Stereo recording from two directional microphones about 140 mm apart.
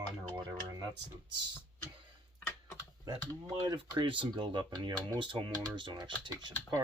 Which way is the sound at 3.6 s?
30° right (ahead or behind).